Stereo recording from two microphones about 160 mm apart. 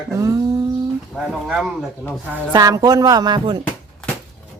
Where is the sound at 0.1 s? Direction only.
20° right (ahead or behind).